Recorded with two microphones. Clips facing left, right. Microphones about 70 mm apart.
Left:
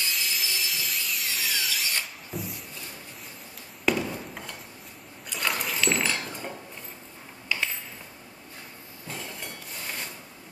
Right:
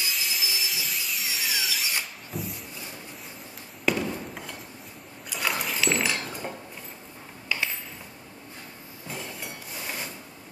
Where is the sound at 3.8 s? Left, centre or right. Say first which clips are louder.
Even; centre.